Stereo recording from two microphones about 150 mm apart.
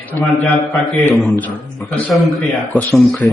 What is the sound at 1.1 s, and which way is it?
Speech, 15° left (ahead or behind).